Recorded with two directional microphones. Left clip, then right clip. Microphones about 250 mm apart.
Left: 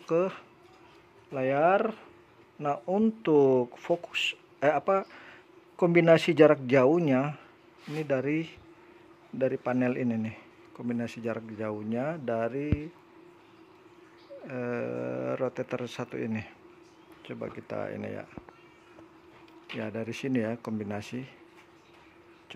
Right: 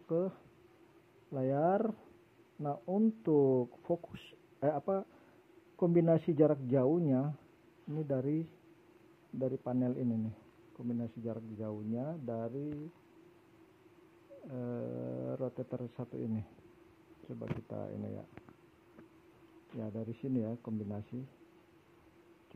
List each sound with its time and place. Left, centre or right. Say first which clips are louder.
0.0 s speech: left 8 dB; centre
1.3 s speech: left 8 dB; centre
2.6 s speech: left 7 dB; centre
4.3 s speech: left 7 dB; centre
14.5 s speech: left 9 dB; left
19.8 s speech: left 8 dB; left